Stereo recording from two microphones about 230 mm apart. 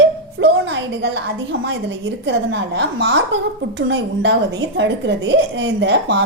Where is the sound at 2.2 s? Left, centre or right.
Right.